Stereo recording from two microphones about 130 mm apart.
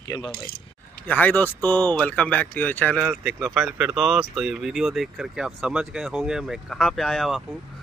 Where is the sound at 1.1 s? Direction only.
10° left (ahead or behind).